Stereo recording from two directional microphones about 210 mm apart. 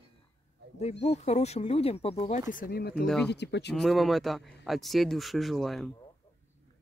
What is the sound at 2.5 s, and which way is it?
Speech, 45° left (ahead or behind).